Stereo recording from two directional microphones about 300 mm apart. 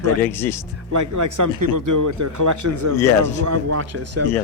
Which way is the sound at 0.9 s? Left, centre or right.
Right.